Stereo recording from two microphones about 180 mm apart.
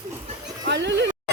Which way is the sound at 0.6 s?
75° right (ahead or behind).